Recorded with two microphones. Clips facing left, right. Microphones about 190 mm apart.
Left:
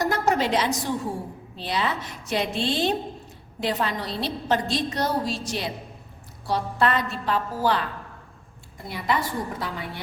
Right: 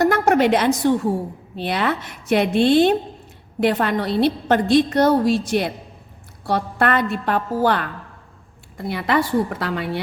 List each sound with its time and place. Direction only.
0.0 s a sound: 60° right (ahead or behind)
1.5 s a woman's voice: 60° right (ahead or behind)
8.8 s a woman's voice: 70° right (ahead or behind)